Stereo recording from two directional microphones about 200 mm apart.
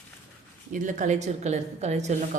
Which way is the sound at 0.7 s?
40° right (ahead or behind).